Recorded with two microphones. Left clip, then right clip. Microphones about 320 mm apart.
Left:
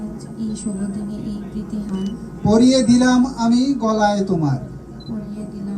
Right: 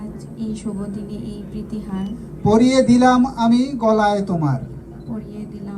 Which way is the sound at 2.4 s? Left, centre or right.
Right.